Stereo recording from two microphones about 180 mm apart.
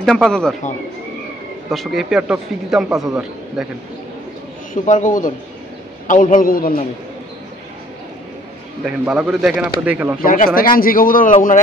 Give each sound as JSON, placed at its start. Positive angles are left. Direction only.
{"t": 0.0, "sound": "a man's voice", "side_deg": 5}
{"t": 1.7, "sound": "a man's voice", "side_deg": 0}
{"t": 4.8, "sound": "speech", "side_deg": 45}
{"t": 8.8, "sound": "a man's voice", "side_deg": -5}
{"t": 10.2, "sound": "speech", "side_deg": 50}